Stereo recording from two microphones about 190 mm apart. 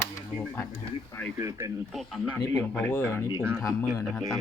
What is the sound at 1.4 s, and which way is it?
Speech, 15° right (ahead or behind).